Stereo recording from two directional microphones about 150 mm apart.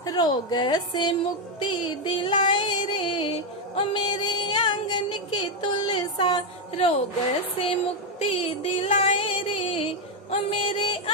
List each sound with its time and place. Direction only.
0.0 s a woman's voice: 25° left (ahead or behind)
1.6 s music: 35° left (ahead or behind)
8.2 s music: 40° left (ahead or behind)